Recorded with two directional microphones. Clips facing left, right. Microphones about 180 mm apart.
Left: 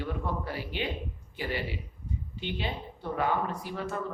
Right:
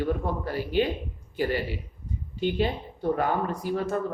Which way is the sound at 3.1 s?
45° right (ahead or behind).